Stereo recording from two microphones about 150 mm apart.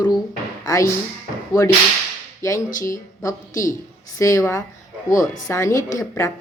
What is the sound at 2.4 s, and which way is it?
A woman's voice, 20° left (ahead or behind).